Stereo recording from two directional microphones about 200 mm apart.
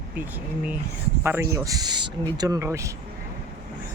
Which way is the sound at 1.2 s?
15° right (ahead or behind).